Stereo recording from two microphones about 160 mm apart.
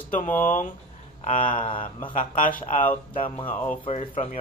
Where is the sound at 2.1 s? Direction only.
55° left (ahead or behind).